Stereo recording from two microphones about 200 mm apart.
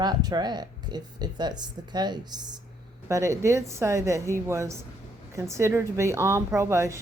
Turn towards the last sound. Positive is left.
turn(degrees=-15)  # may be behind; listen again after turning